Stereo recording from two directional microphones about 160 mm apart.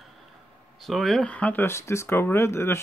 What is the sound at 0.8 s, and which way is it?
Speech, centre (ahead or behind).